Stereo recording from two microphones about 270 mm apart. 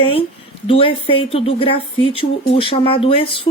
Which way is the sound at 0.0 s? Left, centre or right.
Centre.